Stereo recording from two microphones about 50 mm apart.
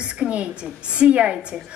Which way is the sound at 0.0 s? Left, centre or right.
Right.